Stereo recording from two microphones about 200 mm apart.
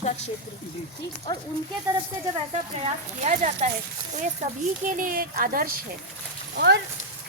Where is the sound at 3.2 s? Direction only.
35° right (ahead or behind).